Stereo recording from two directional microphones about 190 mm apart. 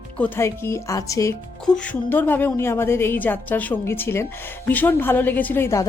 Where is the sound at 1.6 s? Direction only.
5° left (ahead or behind).